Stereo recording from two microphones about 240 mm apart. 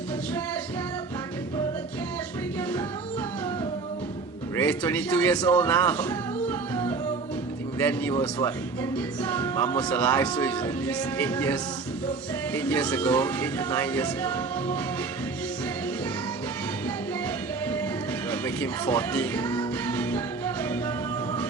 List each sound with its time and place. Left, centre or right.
4.5 s speech: centre
18.3 s music: centre